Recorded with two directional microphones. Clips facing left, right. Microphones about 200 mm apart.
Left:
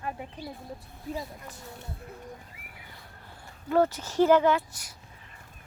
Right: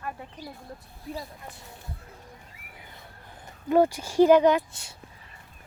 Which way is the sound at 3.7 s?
15° right (ahead or behind).